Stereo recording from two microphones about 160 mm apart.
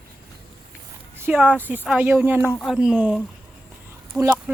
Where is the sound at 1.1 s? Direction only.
10° right (ahead or behind).